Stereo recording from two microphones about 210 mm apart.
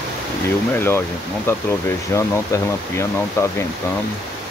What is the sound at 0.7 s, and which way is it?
Speech, 10° left (ahead or behind).